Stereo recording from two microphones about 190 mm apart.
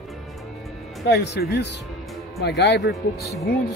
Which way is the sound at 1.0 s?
60° left (ahead or behind).